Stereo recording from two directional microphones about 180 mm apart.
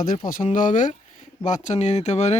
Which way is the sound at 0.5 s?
45° left (ahead or behind).